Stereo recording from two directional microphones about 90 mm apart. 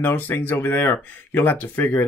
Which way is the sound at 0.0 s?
20° left (ahead or behind).